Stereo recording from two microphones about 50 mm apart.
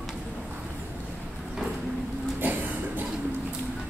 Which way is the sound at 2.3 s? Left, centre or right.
Right.